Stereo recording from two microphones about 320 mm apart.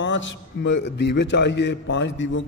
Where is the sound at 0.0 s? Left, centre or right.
Left.